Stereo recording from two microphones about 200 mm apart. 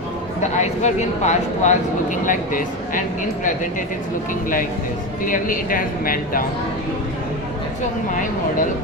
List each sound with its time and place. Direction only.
0.6 s speech: 35° left (ahead or behind)
5.2 s speech: 45° left (ahead or behind)